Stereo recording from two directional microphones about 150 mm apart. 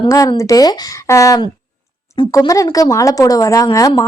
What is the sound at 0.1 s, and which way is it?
A woman's voice, 25° left (ahead or behind).